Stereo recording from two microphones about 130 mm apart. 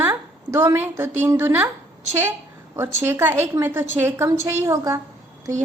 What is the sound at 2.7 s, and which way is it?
A woman's voice, 20° right (ahead or behind).